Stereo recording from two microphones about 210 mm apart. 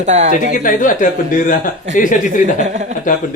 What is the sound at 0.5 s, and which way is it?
Speech, 40° left (ahead or behind).